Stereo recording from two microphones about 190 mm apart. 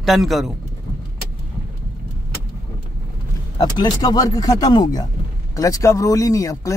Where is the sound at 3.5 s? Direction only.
20° left (ahead or behind).